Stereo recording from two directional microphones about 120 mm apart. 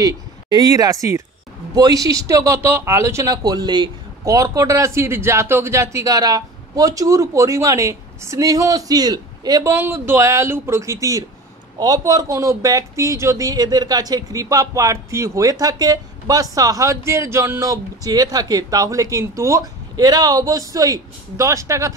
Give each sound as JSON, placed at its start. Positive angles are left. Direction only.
{"t": 0.0, "sound": "speech", "side_deg": -30}